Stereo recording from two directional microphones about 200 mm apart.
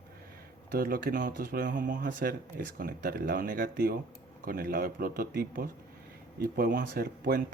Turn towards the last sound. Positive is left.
turn(degrees=-45)  # may be behind; listen again after turning